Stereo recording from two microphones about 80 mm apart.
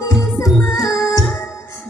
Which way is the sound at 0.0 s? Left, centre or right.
Left.